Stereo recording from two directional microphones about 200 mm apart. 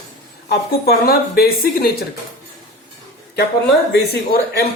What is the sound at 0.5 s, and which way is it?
Speech, 50° left (ahead or behind).